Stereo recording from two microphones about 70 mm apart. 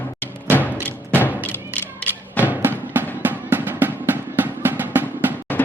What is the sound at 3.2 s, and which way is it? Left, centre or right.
Drum, right.